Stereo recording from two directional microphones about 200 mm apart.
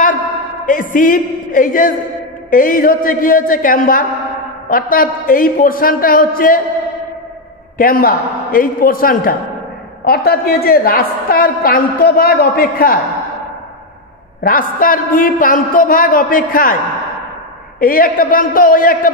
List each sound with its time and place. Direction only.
0.7 s a woman's voice: 40° left (ahead or behind)
7.7 s a woman's voice: 45° left (ahead or behind)
14.4 s a woman's voice: 45° left (ahead or behind)
17.7 s a woman's voice: 45° left (ahead or behind)